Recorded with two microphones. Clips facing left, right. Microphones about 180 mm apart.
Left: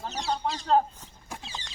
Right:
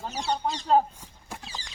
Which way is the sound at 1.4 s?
25° left (ahead or behind).